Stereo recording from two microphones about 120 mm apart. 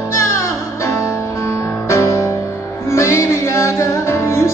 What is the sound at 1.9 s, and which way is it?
Music, 25° left (ahead or behind).